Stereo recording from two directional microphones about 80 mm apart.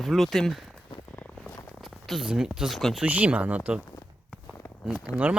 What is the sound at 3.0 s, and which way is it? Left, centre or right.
Speech, centre.